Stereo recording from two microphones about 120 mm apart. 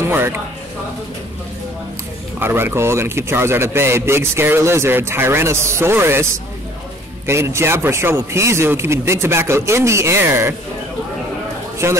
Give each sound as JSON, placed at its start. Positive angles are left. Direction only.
{"t": 0.0, "sound": "speech", "side_deg": -20}
{"t": 2.3, "sound": "a man's voice", "side_deg": -20}
{"t": 7.2, "sound": "a man's voice", "side_deg": -20}
{"t": 11.8, "sound": "a man's voice", "side_deg": -25}